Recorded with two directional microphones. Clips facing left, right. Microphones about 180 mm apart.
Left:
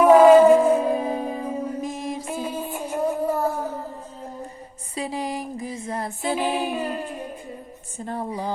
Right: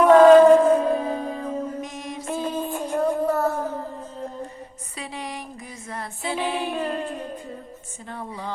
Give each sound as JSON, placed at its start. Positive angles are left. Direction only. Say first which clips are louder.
{"t": 0.0, "sound": "music", "louder": "even", "side_deg": 10}
{"t": 2.2, "sound": "child singing", "louder": "right 2 dB", "side_deg": 10}
{"t": 4.9, "sound": "a sound", "louder": "left 6 dB", "side_deg": 35}
{"t": 6.4, "sound": "music", "louder": "left 1 dB", "side_deg": 40}
{"t": 6.7, "sound": "a sound", "louder": "right 1 dB", "side_deg": 5}
{"t": 8.0, "sound": "speech", "louder": "left 6 dB", "side_deg": 40}